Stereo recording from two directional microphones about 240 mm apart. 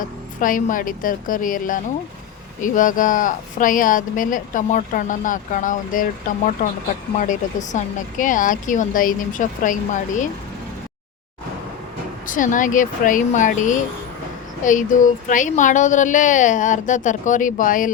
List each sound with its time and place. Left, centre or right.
0.0 s speech: left
7.2 s speech: left
12.2 s speech: left